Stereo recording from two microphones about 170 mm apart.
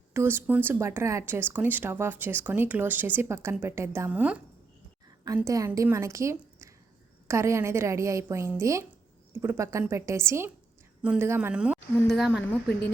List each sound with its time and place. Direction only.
0.1 s speech: 15° right (ahead or behind)